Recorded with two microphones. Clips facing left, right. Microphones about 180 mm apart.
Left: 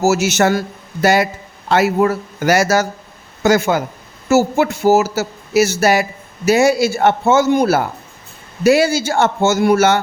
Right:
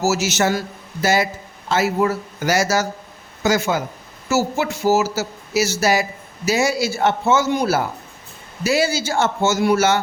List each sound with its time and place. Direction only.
0.0 s speech: 55° left (ahead or behind)